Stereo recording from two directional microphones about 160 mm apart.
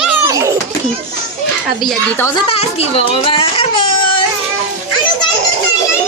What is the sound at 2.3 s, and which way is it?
Speech, 35° left (ahead or behind).